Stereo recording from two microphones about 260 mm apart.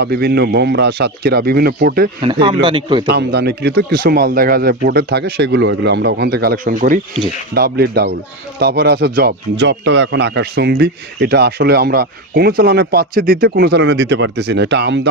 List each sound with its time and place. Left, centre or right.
0.0 s speech: right
2.2 s speech: centre
3.1 s speech: right